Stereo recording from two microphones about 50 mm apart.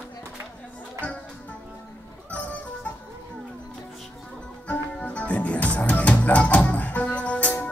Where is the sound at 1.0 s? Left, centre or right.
Left.